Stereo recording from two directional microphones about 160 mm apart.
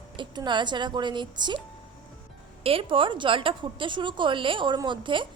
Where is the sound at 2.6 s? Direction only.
35° right (ahead or behind).